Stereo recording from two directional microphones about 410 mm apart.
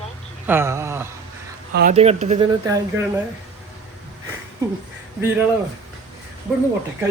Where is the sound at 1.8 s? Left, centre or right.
Centre.